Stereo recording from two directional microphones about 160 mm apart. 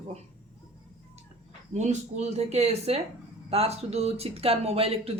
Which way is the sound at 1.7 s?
45° right (ahead or behind).